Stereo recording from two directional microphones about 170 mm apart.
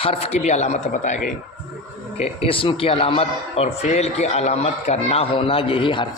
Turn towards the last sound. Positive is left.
turn(degrees=30)  # may be behind; listen again after turning